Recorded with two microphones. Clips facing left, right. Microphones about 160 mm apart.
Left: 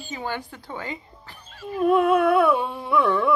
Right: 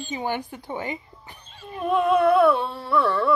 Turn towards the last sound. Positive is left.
turn(degrees=15)  # may be behind; listen again after turning